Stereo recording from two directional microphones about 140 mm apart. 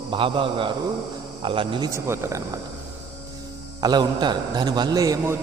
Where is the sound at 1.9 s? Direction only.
20° right (ahead or behind).